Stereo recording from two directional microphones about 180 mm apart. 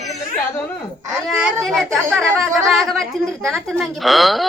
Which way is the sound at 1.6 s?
Centre (ahead or behind).